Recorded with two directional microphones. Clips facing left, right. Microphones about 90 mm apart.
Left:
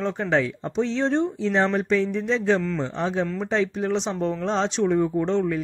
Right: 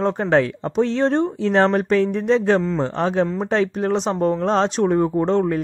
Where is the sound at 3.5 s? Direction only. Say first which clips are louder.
Right 4 dB; 55° right (ahead or behind).